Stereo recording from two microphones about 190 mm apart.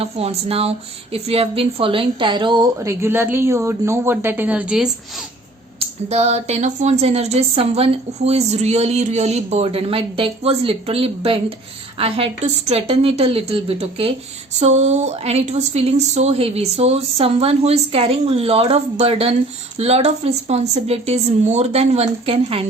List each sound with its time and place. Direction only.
0.0 s a woman's voice: 30° right (ahead or behind); by 5.2 s 5° right (ahead or behind)
6.1 s a woman's voice: 35° right (ahead or behind)